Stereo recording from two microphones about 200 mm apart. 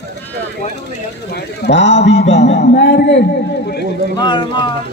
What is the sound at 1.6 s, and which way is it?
A man's voice, 60° left (ahead or behind).